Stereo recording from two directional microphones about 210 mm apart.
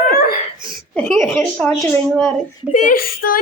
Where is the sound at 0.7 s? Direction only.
5° left (ahead or behind).